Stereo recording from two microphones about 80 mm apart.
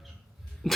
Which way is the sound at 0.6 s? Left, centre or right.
Centre.